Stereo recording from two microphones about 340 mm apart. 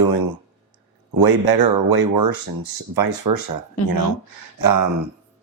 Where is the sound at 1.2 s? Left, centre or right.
Right.